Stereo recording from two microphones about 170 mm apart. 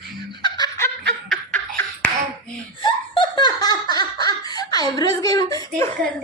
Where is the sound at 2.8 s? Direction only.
30° left (ahead or behind).